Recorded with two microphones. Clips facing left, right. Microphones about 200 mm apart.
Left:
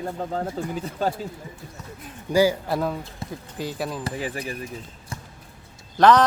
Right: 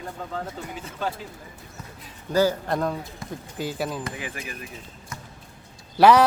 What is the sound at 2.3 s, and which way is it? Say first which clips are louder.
Speech: left 2 dB; 10° left (ahead or behind).